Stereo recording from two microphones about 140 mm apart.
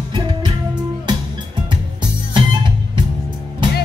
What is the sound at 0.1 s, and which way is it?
Music, 35° right (ahead or behind).